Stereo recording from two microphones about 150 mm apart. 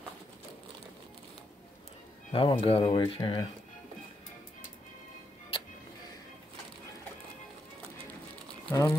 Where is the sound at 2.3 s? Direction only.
40° left (ahead or behind).